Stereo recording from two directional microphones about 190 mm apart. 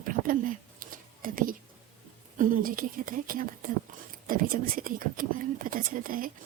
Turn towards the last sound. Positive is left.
turn(degrees=-45)  # may be behind; listen again after turning